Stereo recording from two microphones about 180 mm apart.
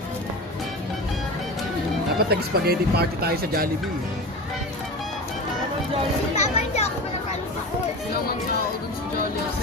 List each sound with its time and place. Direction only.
2.3 s speech: 60° right (ahead or behind)
6.3 s children playing: 40° left (ahead or behind)